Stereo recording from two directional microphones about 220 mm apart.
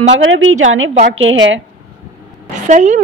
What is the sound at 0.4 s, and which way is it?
A woman's voice, 65° right (ahead or behind).